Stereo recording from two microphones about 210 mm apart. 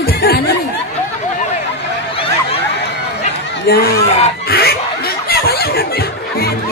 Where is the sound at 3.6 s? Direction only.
50° left (ahead or behind).